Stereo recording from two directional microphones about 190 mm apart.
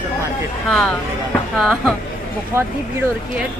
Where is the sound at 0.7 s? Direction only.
5° left (ahead or behind).